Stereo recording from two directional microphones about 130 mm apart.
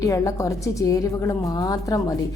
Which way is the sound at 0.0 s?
25° left (ahead or behind).